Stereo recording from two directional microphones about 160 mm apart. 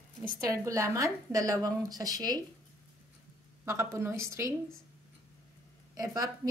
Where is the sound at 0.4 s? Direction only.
20° right (ahead or behind).